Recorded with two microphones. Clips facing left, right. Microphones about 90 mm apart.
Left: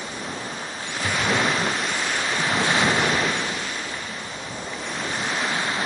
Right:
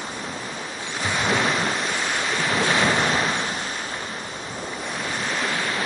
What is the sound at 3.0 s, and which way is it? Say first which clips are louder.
Waves: even; centre (ahead or behind).